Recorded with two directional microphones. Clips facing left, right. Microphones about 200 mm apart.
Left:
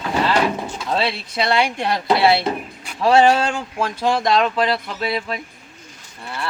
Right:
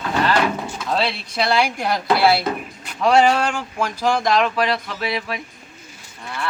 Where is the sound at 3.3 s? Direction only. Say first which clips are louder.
Left 1 dB; 25° left (ahead or behind).